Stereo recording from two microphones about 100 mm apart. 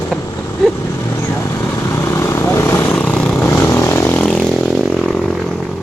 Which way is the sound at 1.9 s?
25° left (ahead or behind).